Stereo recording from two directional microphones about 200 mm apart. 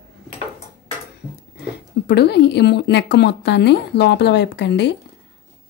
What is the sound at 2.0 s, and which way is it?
A woman's voice, 55° left (ahead or behind).